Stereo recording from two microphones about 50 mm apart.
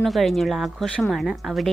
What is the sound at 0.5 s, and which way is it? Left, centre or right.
A woman's voice, centre.